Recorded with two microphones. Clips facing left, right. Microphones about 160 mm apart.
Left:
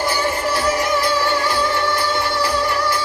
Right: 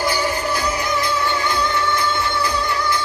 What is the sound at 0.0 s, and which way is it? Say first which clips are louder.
Music: left 1 dB; 30° left (ahead or behind).